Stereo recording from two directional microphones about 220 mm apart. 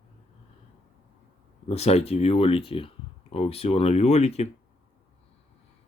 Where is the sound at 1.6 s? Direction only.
30° left (ahead or behind).